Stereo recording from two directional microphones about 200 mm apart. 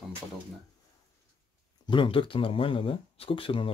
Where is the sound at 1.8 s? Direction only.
25° left (ahead or behind).